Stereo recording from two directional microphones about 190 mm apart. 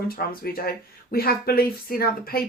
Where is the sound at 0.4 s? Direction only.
55° left (ahead or behind).